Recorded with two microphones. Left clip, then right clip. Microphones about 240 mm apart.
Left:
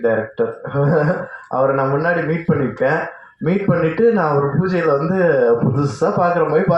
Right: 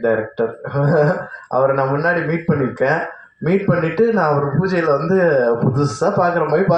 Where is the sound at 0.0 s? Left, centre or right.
Right.